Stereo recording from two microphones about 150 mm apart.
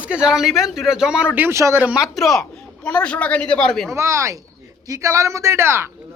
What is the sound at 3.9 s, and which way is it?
Speech, 20° right (ahead or behind).